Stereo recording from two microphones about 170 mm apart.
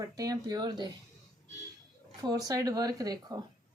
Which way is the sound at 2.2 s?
20° right (ahead or behind).